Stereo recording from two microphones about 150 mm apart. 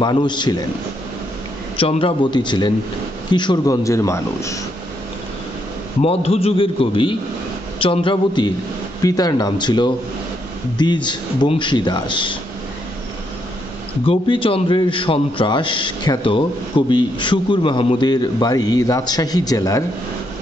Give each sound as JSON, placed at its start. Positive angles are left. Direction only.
{"t": 0.0, "sound": "a man's voice", "side_deg": 30}
{"t": 1.8, "sound": "a man's voice", "side_deg": 35}
{"t": 6.0, "sound": "a man's voice", "side_deg": 40}
{"t": 14.0, "sound": "a man's voice", "side_deg": 35}